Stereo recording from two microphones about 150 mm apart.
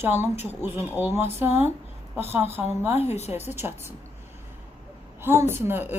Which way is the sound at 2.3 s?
15° right (ahead or behind).